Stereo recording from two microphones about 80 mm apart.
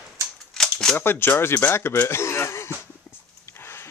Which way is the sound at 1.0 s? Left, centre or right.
Left.